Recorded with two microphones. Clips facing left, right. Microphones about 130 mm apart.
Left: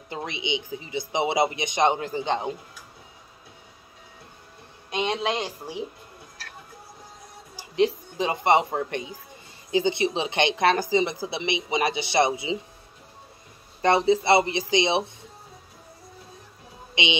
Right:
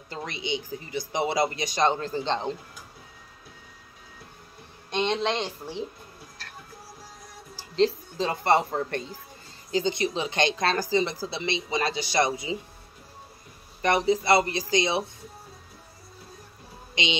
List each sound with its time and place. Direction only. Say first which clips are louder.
0.3 s speech: even; 20° left (ahead or behind)
4.9 s speech: even; 10° left (ahead or behind)
7.5 s a sound: left 1 dB; 15° left (ahead or behind)
9.7 s speech: left 3 dB; 20° left (ahead or behind)
13.7 s speech: left 3 dB; 30° left (ahead or behind)
16.9 s speech: left 2 dB; 25° left (ahead or behind)